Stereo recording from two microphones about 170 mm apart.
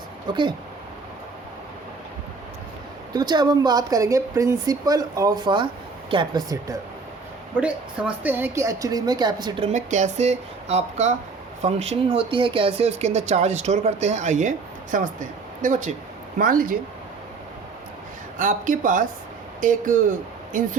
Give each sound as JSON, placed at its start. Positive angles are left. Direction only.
{"t": 0.3, "sound": "speech", "side_deg": -25}
{"t": 3.1, "sound": "speech", "side_deg": -25}
{"t": 7.6, "sound": "speech", "side_deg": -10}
{"t": 9.7, "sound": "speech", "side_deg": -45}
{"t": 18.3, "sound": "speech", "side_deg": -50}